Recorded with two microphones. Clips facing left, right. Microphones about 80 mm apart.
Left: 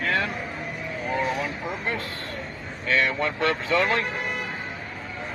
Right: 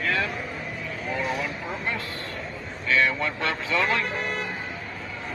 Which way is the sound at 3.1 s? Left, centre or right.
Left.